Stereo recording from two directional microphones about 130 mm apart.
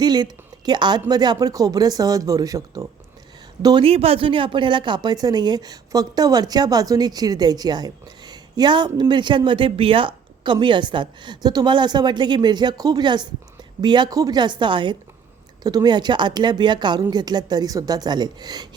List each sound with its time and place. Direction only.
0.0 s a woman's voice: 35° right (ahead or behind)
3.8 s a woman's voice: 50° right (ahead or behind); by 18.7 s 30° right (ahead or behind)